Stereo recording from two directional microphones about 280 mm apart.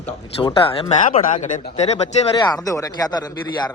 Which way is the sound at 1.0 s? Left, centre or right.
Left.